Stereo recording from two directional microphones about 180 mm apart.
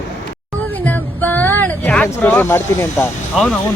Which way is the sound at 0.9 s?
10° left (ahead or behind).